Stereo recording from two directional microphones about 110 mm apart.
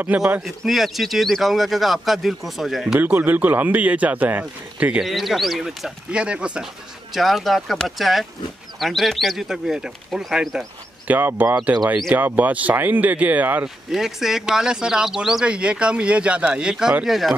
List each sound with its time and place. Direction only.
0.0 s speech: 15° right (ahead or behind)
0.7 s speech: centre (ahead or behind)
3.0 s speech: 15° right (ahead or behind)
5.0 s speech: centre (ahead or behind)
11.1 s speech: 15° right (ahead or behind)
13.9 s speech: 5° right (ahead or behind)